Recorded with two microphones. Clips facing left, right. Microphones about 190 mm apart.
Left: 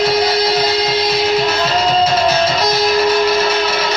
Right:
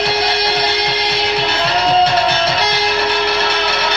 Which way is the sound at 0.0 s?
65° right (ahead or behind).